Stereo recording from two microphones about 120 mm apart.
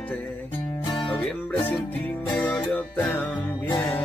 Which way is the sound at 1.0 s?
10° left (ahead or behind).